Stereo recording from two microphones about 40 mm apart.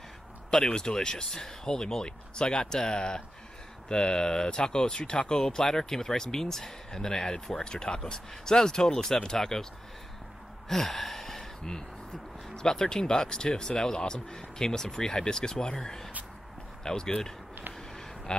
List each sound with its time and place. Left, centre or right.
0.5 s speech: centre
10.7 s gasp: centre
12.5 s speech: centre
17.7 s a sound: centre